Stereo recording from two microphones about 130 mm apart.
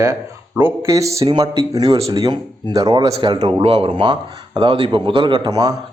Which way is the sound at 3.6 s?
50° right (ahead or behind).